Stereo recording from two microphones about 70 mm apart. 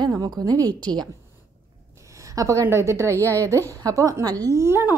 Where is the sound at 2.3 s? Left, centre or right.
Right.